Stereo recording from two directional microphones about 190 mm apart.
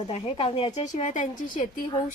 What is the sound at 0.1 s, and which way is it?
A woman's voice, 30° left (ahead or behind).